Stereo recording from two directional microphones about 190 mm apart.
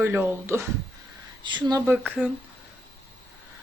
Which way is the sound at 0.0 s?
10° right (ahead or behind).